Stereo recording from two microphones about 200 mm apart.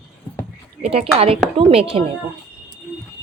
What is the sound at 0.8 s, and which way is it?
A woman's voice, 30° right (ahead or behind).